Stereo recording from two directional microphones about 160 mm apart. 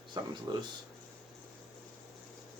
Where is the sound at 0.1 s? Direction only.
25° right (ahead or behind).